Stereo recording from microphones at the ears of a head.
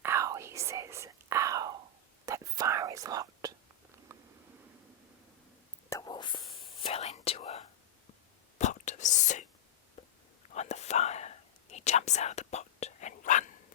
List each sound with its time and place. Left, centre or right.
0.0 s whispering: right
6.2 s whispering: left